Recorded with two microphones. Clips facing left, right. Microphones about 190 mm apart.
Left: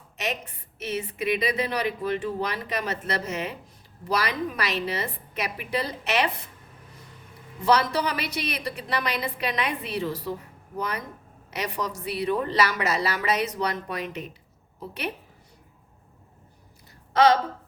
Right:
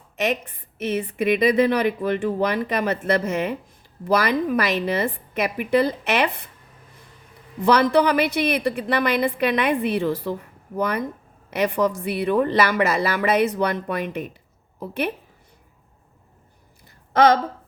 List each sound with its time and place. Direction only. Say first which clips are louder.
0.2 s a woman's voice: right 8 dB; 50° right (ahead or behind)
7.6 s a woman's voice: right 6 dB; 55° right (ahead or behind)